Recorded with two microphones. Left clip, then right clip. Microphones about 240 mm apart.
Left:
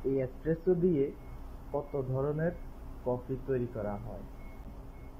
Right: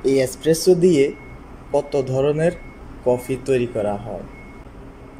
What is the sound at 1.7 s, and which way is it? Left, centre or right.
Speech, right.